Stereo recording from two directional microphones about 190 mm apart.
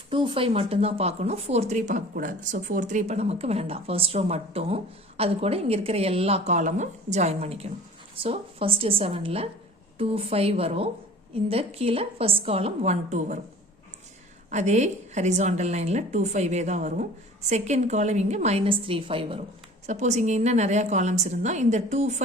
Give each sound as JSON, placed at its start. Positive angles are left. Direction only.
{"t": 0.1, "sound": "a woman's voice", "side_deg": -25}
{"t": 14.5, "sound": "speech", "side_deg": -35}